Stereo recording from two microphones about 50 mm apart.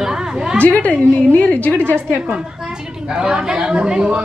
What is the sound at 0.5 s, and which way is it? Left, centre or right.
A woman's voice, left.